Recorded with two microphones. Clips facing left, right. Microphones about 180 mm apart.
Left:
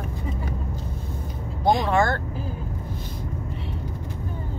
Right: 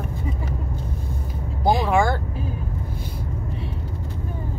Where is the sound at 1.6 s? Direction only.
5° right (ahead or behind).